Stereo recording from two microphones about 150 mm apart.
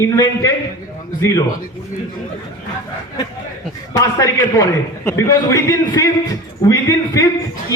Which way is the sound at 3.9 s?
20° left (ahead or behind).